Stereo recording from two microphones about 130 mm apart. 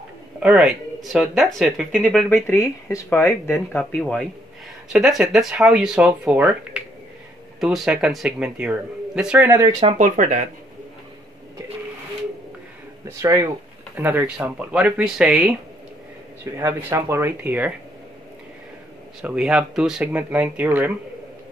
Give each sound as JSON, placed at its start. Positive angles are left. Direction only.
{"t": 0.4, "sound": "speech", "side_deg": -5}
{"t": 4.0, "sound": "speech", "side_deg": 5}
{"t": 9.9, "sound": "speech", "side_deg": -70}
{"t": 13.2, "sound": "speech", "side_deg": -25}
{"t": 13.9, "sound": "speech", "side_deg": -15}
{"t": 16.5, "sound": "speech", "side_deg": -20}
{"t": 19.2, "sound": "speech", "side_deg": -5}